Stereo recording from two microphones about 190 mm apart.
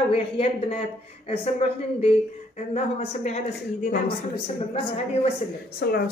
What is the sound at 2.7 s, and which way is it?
Speech, 35° left (ahead or behind).